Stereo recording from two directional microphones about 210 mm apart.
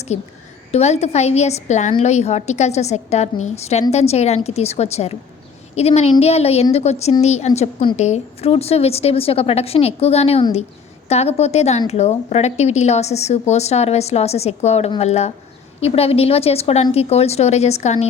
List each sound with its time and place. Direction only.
0.1 s a woman's voice: 35° left (ahead or behind)